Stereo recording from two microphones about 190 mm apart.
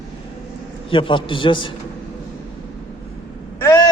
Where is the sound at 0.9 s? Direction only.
30° left (ahead or behind).